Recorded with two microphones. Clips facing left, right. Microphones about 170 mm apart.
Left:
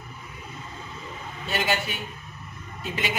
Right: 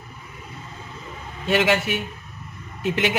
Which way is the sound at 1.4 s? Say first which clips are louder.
Right 7 dB; 90° right.